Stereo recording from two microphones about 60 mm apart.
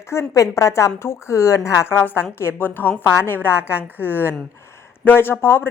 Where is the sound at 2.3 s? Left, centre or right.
Left.